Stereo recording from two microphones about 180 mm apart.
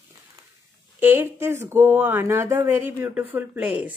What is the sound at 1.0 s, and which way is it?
Speech, 15° right (ahead or behind).